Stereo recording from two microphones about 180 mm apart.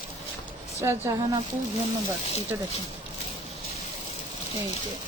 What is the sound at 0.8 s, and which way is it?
Speech, 20° right (ahead or behind).